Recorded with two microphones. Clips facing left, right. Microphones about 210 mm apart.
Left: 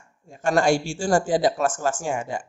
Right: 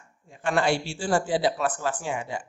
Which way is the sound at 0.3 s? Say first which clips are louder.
Left 4 dB; 45° left (ahead or behind).